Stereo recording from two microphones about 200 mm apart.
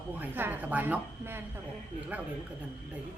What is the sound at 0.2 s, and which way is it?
Speech, 10° right (ahead or behind).